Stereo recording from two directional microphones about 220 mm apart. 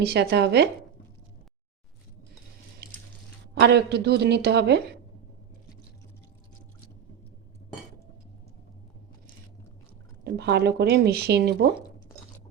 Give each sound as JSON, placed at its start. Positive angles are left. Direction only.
{"t": 0.0, "sound": "speech", "side_deg": -45}
{"t": 3.5, "sound": "speech", "side_deg": -50}
{"t": 10.2, "sound": "speech", "side_deg": -50}